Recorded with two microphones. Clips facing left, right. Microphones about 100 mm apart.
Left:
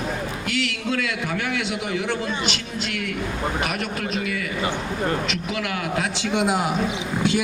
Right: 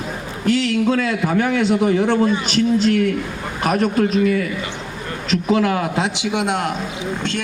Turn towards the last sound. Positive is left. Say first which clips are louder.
# right 1 dB
turn(degrees=0)  # may be behind; listen again after turning